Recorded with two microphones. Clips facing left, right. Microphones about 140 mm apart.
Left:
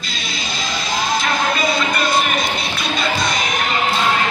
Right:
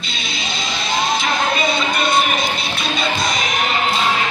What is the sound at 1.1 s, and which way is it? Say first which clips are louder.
Music: left 3 dB; centre (ahead or behind).